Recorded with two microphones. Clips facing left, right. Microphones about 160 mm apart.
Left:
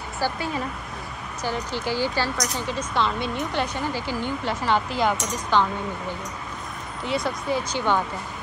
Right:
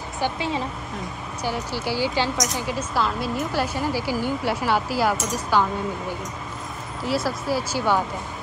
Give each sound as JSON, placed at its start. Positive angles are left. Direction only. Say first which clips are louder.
{"t": 0.2, "sound": "a woman's voice", "louder": "right 1 dB", "side_deg": -25}
{"t": 1.4, "sound": "speech", "louder": "even", "side_deg": -10}
{"t": 7.1, "sound": "speech", "louder": "right 1 dB", "side_deg": -5}